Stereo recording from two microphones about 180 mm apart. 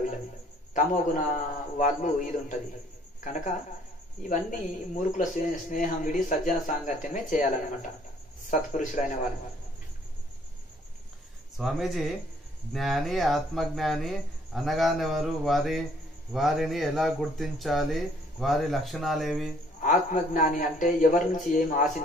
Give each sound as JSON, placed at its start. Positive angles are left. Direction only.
{"t": 0.7, "sound": "speech", "side_deg": 45}
{"t": 11.5, "sound": "speech", "side_deg": 0}
{"t": 19.8, "sound": "speech", "side_deg": 45}